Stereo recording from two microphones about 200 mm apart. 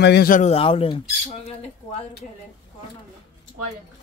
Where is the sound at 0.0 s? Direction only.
50° left (ahead or behind); by 1.0 s 25° left (ahead or behind).